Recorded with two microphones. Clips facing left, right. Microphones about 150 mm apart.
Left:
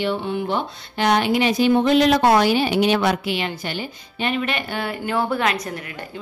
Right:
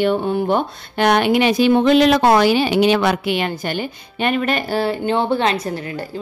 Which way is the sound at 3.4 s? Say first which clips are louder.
Right 5 dB; 50° right (ahead or behind).